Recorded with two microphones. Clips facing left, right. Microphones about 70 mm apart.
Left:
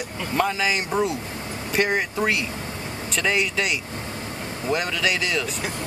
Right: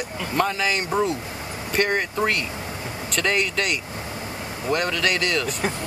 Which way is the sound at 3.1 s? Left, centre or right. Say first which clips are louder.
Even; centre.